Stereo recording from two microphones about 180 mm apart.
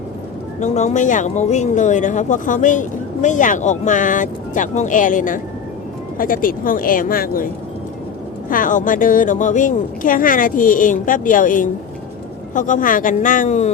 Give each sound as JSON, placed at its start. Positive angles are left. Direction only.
{"t": 0.6, "sound": "speech", "side_deg": 40}